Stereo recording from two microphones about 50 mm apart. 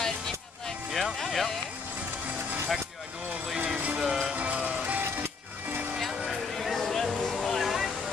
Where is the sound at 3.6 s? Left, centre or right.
Right.